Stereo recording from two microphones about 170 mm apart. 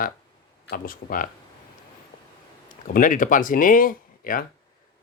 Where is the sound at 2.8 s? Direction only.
50° left (ahead or behind).